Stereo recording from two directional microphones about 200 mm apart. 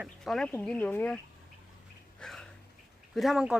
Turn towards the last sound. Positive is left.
turn(degrees=-5)  # may be behind; listen again after turning